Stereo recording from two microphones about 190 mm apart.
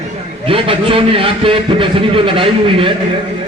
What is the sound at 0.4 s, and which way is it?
A man's voice, 25° right (ahead or behind).